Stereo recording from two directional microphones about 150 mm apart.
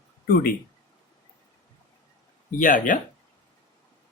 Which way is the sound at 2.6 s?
60° left (ahead or behind).